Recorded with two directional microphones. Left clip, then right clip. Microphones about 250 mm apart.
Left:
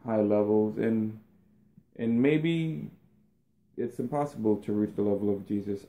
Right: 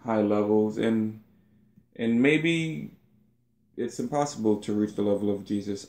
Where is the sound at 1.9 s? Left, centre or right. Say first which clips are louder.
Right 3 dB; centre.